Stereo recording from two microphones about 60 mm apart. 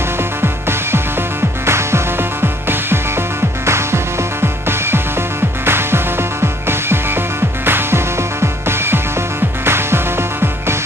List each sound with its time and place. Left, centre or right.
0.4 s music: right